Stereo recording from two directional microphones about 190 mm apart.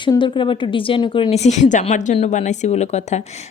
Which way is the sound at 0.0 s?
25° left (ahead or behind).